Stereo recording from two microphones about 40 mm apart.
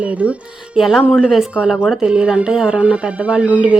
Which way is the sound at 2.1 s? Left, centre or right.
Right.